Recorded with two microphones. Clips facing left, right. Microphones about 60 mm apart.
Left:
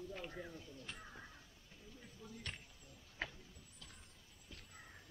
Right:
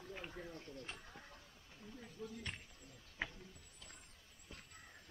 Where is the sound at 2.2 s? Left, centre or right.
Right.